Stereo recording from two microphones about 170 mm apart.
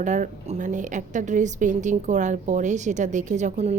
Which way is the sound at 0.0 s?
45° right (ahead or behind).